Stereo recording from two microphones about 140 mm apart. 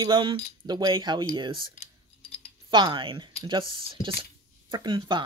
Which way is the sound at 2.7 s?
35° right (ahead or behind).